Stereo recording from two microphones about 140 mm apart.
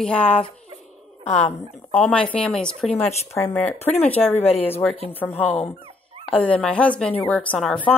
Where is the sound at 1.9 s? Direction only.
10° left (ahead or behind).